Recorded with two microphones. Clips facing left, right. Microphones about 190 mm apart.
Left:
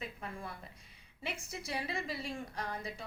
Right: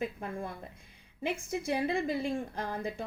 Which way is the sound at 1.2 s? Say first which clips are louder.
Right 10 dB; 55° right (ahead or behind).